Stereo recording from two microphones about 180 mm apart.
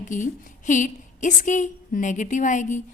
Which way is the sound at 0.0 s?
45° left (ahead or behind).